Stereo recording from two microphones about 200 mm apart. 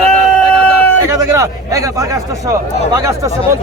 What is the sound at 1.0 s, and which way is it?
Speech, 15° right (ahead or behind).